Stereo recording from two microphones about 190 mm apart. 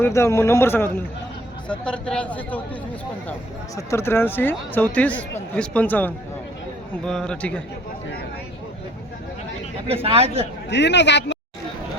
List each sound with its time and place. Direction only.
0.0 s speech: 15° left (ahead or behind)
3.8 s a man's voice: 15° left (ahead or behind)
9.8 s speech: 30° right (ahead or behind)
10.7 s speech: 65° left (ahead or behind)